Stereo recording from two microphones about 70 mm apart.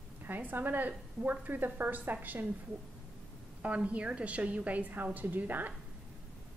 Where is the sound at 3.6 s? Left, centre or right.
Centre.